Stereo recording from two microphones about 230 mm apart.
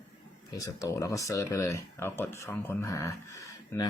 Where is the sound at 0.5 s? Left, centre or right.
Centre.